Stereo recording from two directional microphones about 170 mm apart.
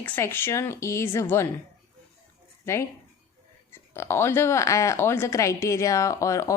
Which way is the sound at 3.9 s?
15° left (ahead or behind).